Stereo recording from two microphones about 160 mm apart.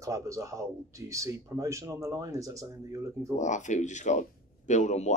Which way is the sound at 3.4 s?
50° left (ahead or behind).